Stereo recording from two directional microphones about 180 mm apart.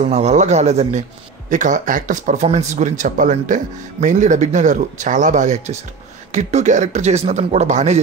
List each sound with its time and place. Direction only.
0.0 s speech: 40° right (ahead or behind)